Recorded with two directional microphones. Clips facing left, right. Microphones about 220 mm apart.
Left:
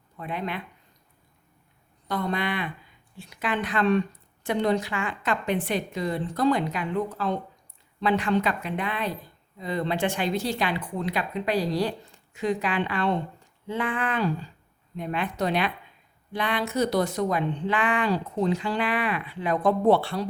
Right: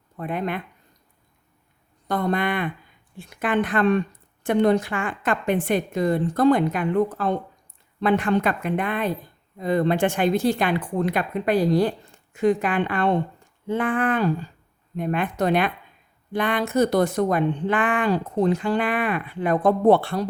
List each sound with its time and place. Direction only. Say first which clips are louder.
0.2 s speech: right 5 dB; 50° right (ahead or behind)
2.0 s speech: right 5 dB; 50° right (ahead or behind)